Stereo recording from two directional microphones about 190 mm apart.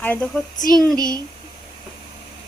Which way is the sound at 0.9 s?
20° right (ahead or behind).